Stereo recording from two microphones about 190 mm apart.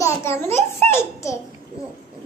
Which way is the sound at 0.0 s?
15° left (ahead or behind).